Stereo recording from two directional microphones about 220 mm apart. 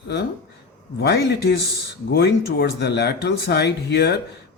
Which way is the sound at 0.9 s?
45° left (ahead or behind).